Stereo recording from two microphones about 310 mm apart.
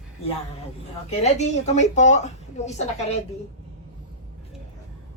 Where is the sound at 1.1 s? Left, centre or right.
Left.